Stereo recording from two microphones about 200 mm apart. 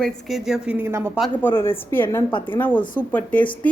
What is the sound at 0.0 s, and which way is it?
A woman's voice, centre (ahead or behind).